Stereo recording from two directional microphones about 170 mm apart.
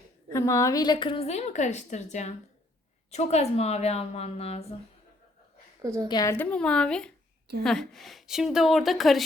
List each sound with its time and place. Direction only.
0.3 s a woman's voice: 20° left (ahead or behind); by 4.6 s 35° left (ahead or behind)
5.8 s a woman's voice: 20° right (ahead or behind)
6.1 s a woman's voice: 20° left (ahead or behind); by 9.2 s centre (ahead or behind)